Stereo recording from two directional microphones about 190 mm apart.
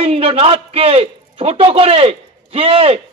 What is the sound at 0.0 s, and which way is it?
A man's voice, 30° right (ahead or behind).